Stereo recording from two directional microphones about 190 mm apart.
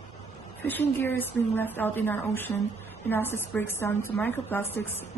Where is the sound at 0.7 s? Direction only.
10° left (ahead or behind).